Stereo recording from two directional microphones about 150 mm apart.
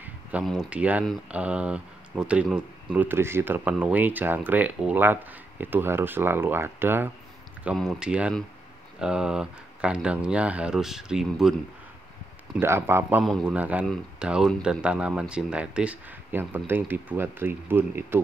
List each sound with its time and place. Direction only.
0.0 s a sound: 10° right (ahead or behind)
0.5 s speech: 5° right (ahead or behind)
7.6 s speech: centre (ahead or behind)
12.5 s speech: 15° right (ahead or behind)
13.2 s speech: centre (ahead or behind)